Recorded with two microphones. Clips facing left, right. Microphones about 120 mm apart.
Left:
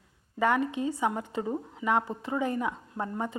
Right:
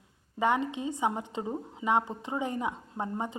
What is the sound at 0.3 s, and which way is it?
A woman's voice, 20° right (ahead or behind).